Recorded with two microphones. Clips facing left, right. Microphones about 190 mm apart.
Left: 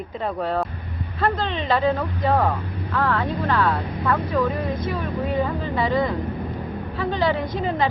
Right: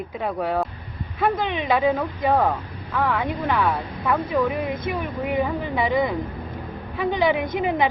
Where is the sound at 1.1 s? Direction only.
15° right (ahead or behind).